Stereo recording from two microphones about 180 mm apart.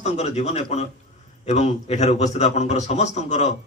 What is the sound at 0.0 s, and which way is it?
A man's voice, 40° left (ahead or behind).